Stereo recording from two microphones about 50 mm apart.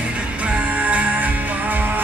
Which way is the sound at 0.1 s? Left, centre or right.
Right.